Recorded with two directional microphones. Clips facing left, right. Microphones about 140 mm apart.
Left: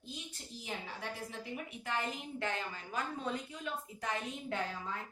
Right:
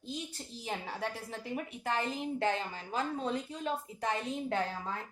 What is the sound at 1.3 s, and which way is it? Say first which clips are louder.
Speech: right 4 dB; 35° right (ahead or behind).